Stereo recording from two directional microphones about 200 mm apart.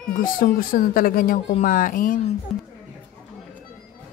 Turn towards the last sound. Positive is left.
turn(degrees=45)  # may be behind; listen again after turning